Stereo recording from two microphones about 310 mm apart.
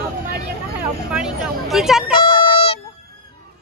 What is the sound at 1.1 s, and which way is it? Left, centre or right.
Speech, centre.